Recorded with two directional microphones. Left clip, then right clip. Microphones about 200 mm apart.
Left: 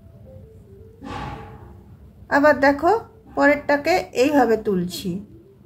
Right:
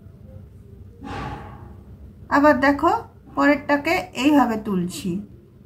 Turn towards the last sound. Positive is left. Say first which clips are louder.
# left 4 dB
turn(degrees=25)  # may be behind; listen again after turning